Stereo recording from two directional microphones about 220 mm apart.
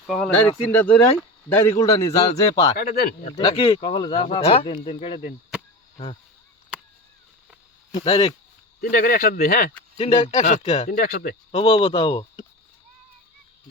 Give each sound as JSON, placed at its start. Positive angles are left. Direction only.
{"t": 0.1, "sound": "a man's voice", "side_deg": 5}
{"t": 2.7, "sound": "speech", "side_deg": 40}
{"t": 3.3, "sound": "speech", "side_deg": 25}
{"t": 7.9, "sound": "speech", "side_deg": 25}
{"t": 8.8, "sound": "speech", "side_deg": 40}
{"t": 10.0, "sound": "speech", "side_deg": 30}
{"t": 11.0, "sound": "speech", "side_deg": 45}
{"t": 11.5, "sound": "speech", "side_deg": 25}